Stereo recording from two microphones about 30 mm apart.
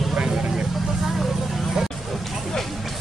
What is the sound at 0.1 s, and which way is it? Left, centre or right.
Vehicle, right.